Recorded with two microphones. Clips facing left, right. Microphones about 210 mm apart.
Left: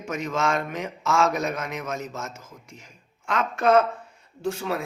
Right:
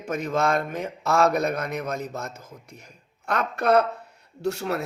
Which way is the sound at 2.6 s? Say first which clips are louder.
Even; 60° right (ahead or behind).